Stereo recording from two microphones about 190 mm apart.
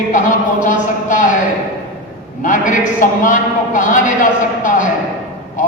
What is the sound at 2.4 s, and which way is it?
A man's voice, 45° left (ahead or behind).